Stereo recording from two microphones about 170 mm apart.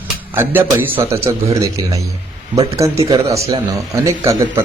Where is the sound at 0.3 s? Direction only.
10° right (ahead or behind).